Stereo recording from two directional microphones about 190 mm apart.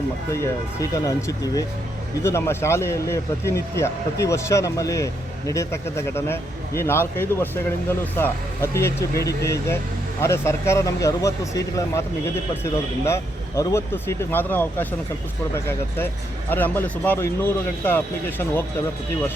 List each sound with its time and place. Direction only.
0.3 s speech: 15° left (ahead or behind)
13.6 s speech: 15° left (ahead or behind)